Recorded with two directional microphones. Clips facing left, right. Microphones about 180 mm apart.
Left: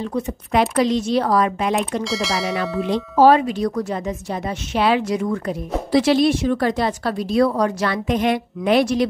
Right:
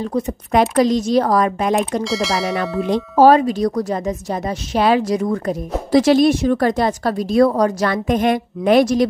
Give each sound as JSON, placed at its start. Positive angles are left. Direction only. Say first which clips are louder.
{"t": 0.0, "sound": "a woman's voice", "louder": "right 3 dB", "side_deg": -45}
{"t": 2.0, "sound": "speech", "louder": "right 3 dB", "side_deg": 0}
{"t": 2.9, "sound": "a woman's voice", "louder": "right 2 dB", "side_deg": -45}